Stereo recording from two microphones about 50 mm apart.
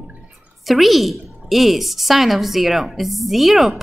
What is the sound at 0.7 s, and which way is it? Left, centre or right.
A woman's voice, centre.